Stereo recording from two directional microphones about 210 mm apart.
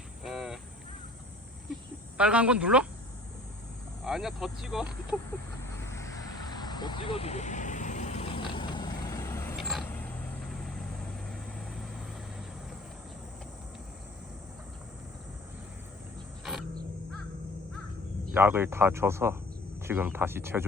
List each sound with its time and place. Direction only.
0.2 s a sound: centre (ahead or behind)
2.1 s speech: 5° right (ahead or behind)
4.0 s speech: centre (ahead or behind)
5.9 s vehicle: 15° left (ahead or behind)
9.6 s vehicle: centre (ahead or behind)
16.4 s wild animals: centre (ahead or behind)
18.3 s speech: 10° right (ahead or behind)